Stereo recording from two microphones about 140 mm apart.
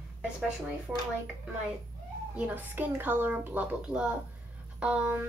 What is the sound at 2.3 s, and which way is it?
A woman's voice, 10° right (ahead or behind).